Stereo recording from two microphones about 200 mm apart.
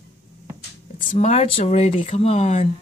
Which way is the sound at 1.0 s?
35° left (ahead or behind).